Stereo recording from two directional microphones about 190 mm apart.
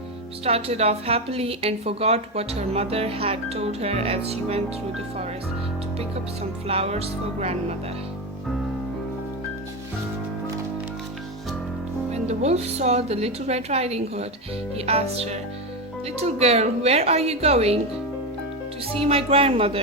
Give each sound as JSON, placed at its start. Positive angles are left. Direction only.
{"t": 0.4, "sound": "a woman's voice", "side_deg": -35}
{"t": 6.7, "sound": "a woman's voice", "side_deg": -30}
{"t": 12.1, "sound": "a woman's voice", "side_deg": -35}
{"t": 18.9, "sound": "speech", "side_deg": -30}